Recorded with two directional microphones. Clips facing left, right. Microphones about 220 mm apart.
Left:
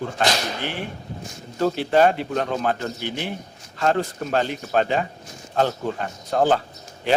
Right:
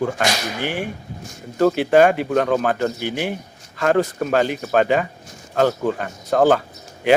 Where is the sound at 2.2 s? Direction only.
50° right (ahead or behind).